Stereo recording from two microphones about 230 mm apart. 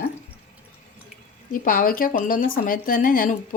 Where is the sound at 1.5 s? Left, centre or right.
Left.